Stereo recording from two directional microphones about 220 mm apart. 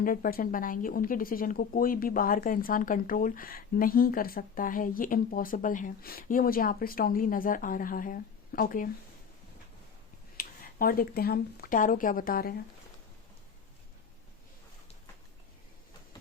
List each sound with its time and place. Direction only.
0.0 s a woman's voice: 40° left (ahead or behind)
10.3 s speech: 40° left (ahead or behind)